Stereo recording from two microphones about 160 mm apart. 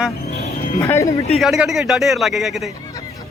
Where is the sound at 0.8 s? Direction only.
20° left (ahead or behind).